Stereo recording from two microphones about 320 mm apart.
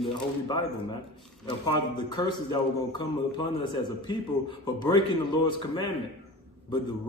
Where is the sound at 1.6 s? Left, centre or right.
Centre.